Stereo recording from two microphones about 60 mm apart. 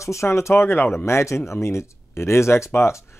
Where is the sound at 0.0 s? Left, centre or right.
Left.